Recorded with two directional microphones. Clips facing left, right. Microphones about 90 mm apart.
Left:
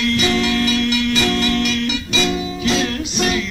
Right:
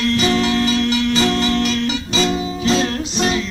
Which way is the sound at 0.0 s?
35° right (ahead or behind).